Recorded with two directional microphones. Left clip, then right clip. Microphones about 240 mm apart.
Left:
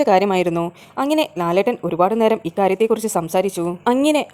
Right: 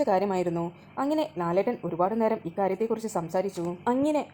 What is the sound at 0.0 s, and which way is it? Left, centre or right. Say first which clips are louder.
Speech: left 10 dB; left.